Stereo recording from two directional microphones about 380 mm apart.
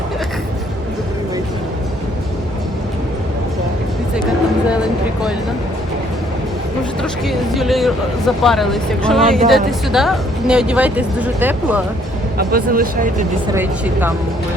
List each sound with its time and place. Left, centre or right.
7.0 s speech: centre
12.4 s speech: right
13.5 s speech: centre